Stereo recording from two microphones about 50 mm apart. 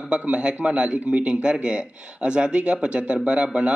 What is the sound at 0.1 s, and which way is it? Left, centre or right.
Speech, right.